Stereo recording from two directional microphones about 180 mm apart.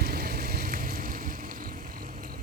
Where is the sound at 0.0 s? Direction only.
55° right (ahead or behind).